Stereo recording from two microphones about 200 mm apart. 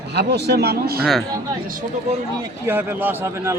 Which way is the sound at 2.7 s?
10° right (ahead or behind).